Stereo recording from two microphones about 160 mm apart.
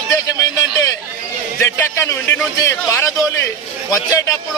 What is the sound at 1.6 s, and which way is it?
A man's voice, 15° left (ahead or behind).